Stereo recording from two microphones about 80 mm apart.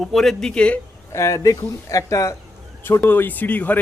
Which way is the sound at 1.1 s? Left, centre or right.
Left.